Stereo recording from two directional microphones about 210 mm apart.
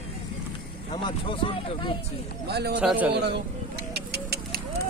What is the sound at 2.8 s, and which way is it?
Speech, 5° right (ahead or behind).